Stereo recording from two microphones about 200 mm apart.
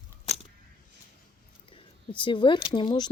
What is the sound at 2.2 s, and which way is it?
Speech, 25° left (ahead or behind).